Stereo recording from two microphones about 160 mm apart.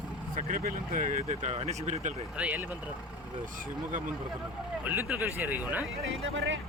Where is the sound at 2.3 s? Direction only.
10° right (ahead or behind).